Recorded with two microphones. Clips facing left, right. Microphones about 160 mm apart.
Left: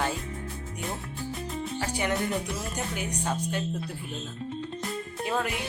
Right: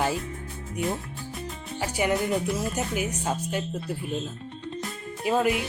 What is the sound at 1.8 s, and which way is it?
Speech, 10° right (ahead or behind).